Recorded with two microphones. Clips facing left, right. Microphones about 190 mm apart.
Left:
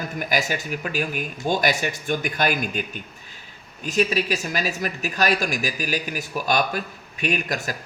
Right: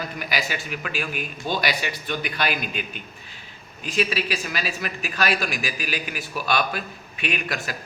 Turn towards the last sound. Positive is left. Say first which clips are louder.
# left 3 dB
turn(degrees=45)  # may be behind; listen again after turning